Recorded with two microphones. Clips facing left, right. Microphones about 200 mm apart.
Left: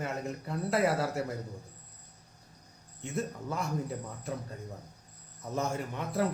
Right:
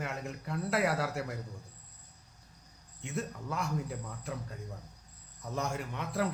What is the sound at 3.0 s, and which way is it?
Speech, centre (ahead or behind).